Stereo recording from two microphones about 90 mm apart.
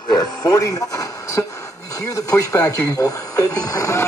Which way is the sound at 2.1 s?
40° left (ahead or behind).